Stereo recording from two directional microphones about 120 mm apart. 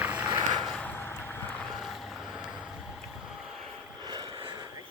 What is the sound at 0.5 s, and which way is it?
Vehicle, 5° left (ahead or behind).